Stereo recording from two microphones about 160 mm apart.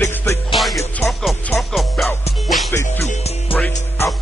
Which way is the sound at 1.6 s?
Centre (ahead or behind).